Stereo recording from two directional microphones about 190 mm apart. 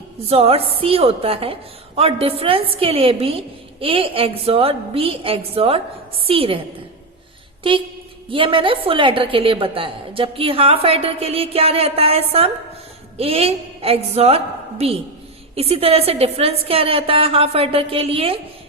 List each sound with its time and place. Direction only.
0.3 s a woman's voice: 30° right (ahead or behind)
8.3 s a woman's voice: 30° right (ahead or behind)